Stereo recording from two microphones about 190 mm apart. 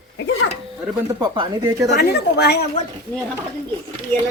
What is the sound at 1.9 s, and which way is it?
Speech, 55° left (ahead or behind).